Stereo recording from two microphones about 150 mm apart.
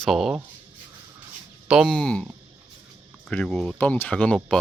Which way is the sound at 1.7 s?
5° right (ahead or behind).